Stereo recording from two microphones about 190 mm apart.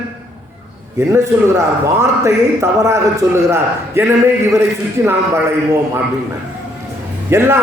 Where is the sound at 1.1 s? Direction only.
15° right (ahead or behind).